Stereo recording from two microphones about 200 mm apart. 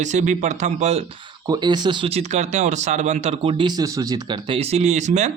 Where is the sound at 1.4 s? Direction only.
20° right (ahead or behind).